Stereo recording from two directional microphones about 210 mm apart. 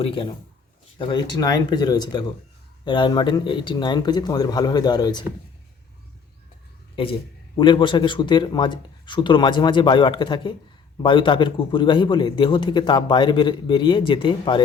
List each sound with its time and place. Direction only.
0.0 s a man's voice: 25° left (ahead or behind)
6.9 s a man's voice: 25° left (ahead or behind)